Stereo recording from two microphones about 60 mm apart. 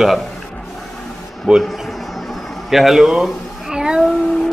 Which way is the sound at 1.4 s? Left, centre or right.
Centre.